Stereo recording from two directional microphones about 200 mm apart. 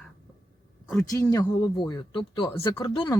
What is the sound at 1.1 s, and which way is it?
Speech, 15° left (ahead or behind).